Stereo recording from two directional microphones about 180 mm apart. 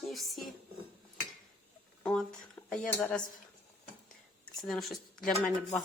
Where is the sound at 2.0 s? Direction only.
5° left (ahead or behind).